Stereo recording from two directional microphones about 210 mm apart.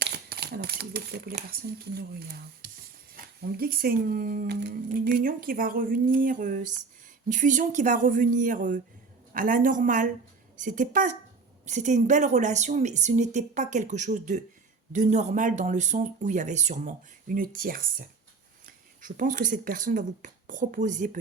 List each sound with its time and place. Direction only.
0.0 s speech: 50° right (ahead or behind)